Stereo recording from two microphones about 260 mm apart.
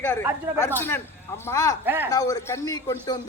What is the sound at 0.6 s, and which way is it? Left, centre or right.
A man's voice, centre.